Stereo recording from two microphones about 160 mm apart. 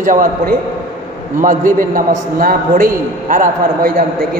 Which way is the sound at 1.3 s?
55° right (ahead or behind).